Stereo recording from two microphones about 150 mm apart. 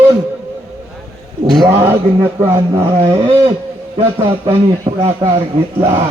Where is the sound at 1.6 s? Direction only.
40° right (ahead or behind).